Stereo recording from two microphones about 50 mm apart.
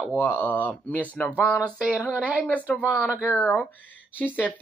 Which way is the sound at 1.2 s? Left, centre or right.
Left.